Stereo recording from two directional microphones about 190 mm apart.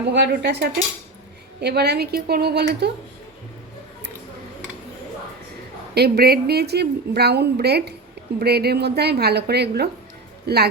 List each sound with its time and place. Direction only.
0.1 s a woman's voice: 65° right (ahead or behind)
5.9 s a woman's voice: 55° right (ahead or behind)